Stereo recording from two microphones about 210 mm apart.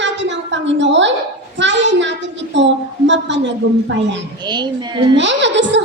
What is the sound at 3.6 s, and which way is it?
Speech, 65° right (ahead or behind).